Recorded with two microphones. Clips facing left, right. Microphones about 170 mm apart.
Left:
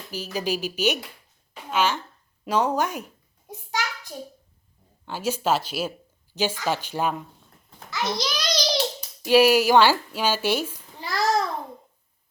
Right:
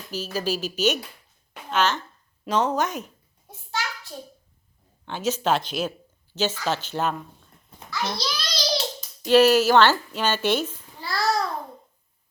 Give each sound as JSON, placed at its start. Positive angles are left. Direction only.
{"t": 0.1, "sound": "speech", "side_deg": 15}
{"t": 3.7, "sound": "hands", "side_deg": 15}
{"t": 5.0, "sound": "a child's voice", "side_deg": 10}
{"t": 9.0, "sound": "a sound", "side_deg": 10}